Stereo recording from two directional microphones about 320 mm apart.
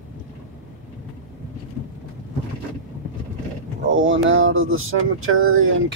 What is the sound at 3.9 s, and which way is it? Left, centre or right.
Speech, right.